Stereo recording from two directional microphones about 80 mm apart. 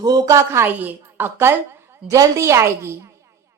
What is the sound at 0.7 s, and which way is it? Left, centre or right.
Speech, right.